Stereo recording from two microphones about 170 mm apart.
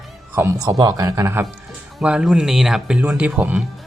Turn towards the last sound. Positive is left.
turn(degrees=-5)  # may be behind; listen again after turning